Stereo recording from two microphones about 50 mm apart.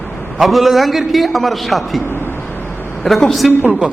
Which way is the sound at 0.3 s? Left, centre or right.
Centre.